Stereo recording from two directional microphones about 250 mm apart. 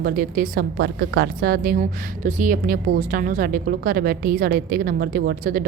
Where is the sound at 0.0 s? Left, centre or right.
Right.